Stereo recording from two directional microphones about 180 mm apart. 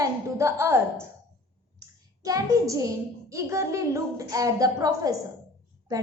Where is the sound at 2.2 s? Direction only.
20° right (ahead or behind).